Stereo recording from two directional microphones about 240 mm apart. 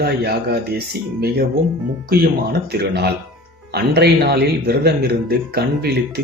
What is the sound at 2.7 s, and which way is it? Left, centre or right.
Speech, right.